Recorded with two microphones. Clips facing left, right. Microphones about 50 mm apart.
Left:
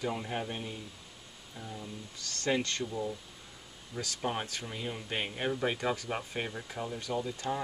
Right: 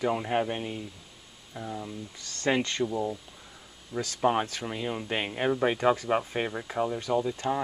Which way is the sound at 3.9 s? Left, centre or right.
Centre.